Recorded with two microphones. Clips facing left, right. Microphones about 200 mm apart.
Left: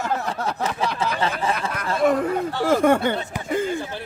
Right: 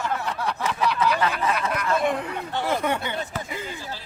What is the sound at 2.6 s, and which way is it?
Speech, 50° left (ahead or behind).